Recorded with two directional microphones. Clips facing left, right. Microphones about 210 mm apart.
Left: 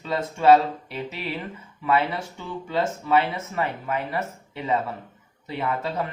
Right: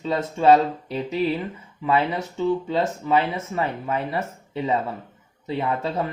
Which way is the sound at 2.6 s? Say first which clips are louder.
Right 2 dB; 25° right (ahead or behind).